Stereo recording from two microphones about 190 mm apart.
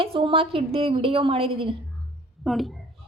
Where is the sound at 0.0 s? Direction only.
30° right (ahead or behind).